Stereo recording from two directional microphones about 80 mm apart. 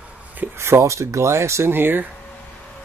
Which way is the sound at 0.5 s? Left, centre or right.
Right.